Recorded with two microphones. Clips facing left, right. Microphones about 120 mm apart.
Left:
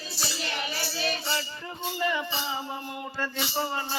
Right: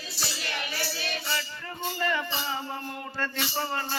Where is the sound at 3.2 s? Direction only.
10° left (ahead or behind).